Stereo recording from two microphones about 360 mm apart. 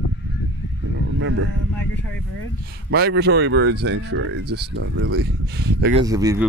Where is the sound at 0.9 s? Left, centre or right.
Right.